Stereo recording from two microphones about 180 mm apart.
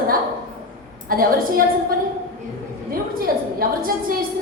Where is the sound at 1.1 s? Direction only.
55° right (ahead or behind).